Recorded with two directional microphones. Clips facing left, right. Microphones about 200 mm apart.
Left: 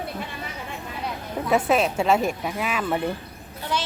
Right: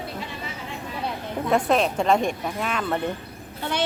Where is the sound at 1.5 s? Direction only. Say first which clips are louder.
Even; 5° left (ahead or behind).